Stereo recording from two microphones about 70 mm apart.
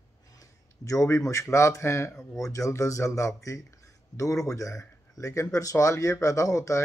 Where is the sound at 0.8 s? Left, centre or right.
Left.